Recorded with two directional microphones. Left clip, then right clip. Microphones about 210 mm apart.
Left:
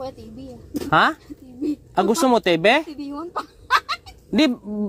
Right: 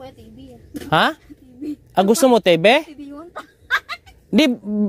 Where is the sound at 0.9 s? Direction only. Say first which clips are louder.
Even; 60° right (ahead or behind).